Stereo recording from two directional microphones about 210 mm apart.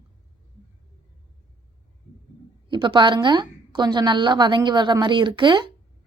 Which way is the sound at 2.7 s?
20° right (ahead or behind).